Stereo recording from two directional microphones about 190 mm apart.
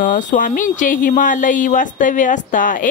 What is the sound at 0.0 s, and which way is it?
Speech, 40° left (ahead or behind).